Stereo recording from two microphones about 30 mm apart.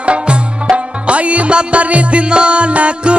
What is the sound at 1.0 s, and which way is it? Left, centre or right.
Music, right.